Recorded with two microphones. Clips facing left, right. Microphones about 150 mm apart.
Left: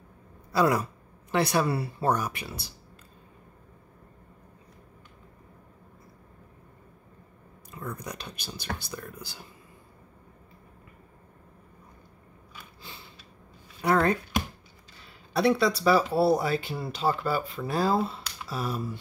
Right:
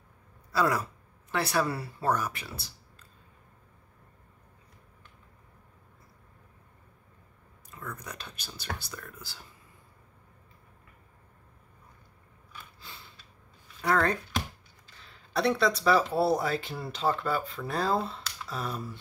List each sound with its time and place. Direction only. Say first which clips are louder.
0.5 s speech: left 3 dB; 15° left (ahead or behind)
7.7 s speech: left 4 dB; 15° left (ahead or behind)
13.7 s speech: left 3 dB; 15° left (ahead or behind)
18.2 s a sound: left 3 dB; 10° left (ahead or behind)